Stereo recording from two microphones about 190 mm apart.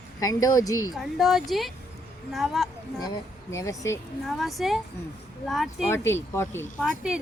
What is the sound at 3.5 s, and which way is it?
Speech, 15° left (ahead or behind).